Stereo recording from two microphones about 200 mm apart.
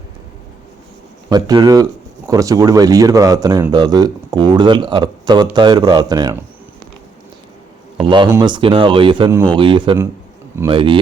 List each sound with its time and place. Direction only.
1.3 s speech: 20° right (ahead or behind)
7.9 s speech: 25° right (ahead or behind)